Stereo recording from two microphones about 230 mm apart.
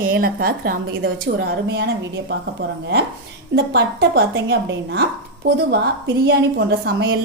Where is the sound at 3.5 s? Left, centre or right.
Right.